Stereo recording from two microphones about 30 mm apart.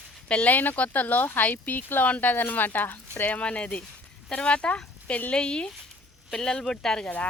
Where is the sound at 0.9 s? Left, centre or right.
Left.